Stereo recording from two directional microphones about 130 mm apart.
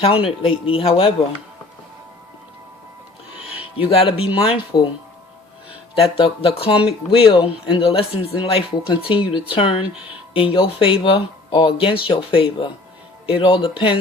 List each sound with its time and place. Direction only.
0.0 s speech: 45° left (ahead or behind)
3.8 s speech: 45° left (ahead or behind)
6.0 s speech: 45° left (ahead or behind)